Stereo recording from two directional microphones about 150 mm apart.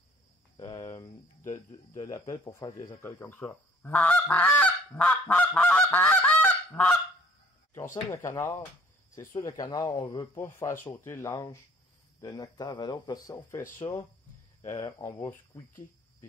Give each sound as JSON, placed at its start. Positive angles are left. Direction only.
{"t": 0.6, "sound": "a sound", "side_deg": 25}
{"t": 1.7, "sound": "speech", "side_deg": 20}
{"t": 3.1, "sound": "speech", "side_deg": 15}
{"t": 9.3, "sound": "speech", "side_deg": 25}